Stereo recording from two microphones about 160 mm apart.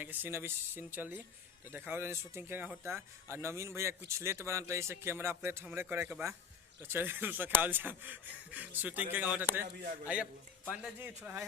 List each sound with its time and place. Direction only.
0.0 s speech: 10° right (ahead or behind)
10.7 s speech: 5° right (ahead or behind)
11.2 s speech: 15° right (ahead or behind)